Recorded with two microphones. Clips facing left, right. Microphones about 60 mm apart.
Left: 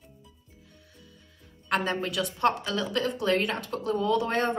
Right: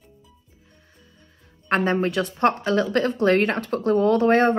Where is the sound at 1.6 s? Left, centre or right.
Right.